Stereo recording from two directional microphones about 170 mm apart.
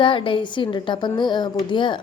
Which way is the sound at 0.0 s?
30° left (ahead or behind).